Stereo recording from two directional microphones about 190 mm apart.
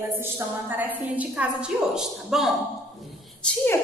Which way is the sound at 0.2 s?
10° right (ahead or behind).